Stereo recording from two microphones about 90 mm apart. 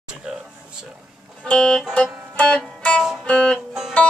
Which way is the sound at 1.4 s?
5° left (ahead or behind).